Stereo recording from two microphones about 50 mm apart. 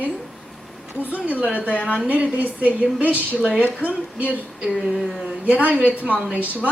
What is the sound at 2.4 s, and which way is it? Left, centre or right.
A woman's voice, right.